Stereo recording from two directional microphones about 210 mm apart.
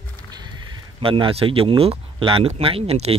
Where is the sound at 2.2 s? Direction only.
25° right (ahead or behind).